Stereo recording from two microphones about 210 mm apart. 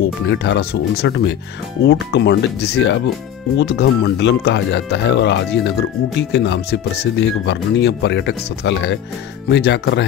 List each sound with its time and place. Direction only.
0.0 s speech: 55° left (ahead or behind)